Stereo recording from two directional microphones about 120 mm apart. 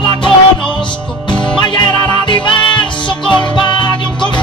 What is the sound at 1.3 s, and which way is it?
Music, 40° left (ahead or behind).